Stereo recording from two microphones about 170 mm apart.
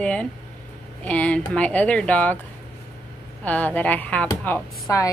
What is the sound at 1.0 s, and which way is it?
Speech, 10° left (ahead or behind).